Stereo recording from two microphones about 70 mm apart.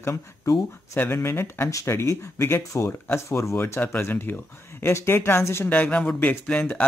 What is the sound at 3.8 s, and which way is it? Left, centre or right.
Speech, left.